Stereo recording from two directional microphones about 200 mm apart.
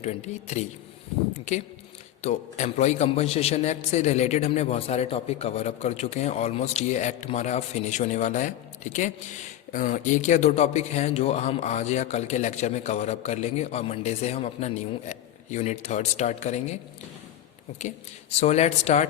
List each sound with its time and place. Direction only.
0.0 s a man's voice: 35° left (ahead or behind)
2.2 s a man's voice: 35° left (ahead or behind)
18.3 s a man's voice: 35° left (ahead or behind)